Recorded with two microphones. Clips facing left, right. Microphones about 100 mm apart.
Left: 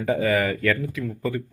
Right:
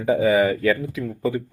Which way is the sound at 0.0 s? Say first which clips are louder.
Right 4 dB; 15° right (ahead or behind).